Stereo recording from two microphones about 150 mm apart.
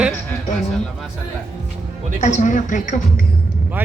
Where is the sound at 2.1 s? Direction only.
50° left (ahead or behind).